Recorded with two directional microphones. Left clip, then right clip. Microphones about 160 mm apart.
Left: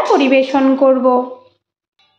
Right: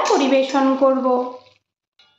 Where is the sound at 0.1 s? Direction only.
35° left (ahead or behind).